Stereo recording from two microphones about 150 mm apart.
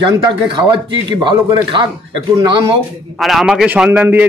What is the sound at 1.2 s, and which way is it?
Speech, 30° right (ahead or behind).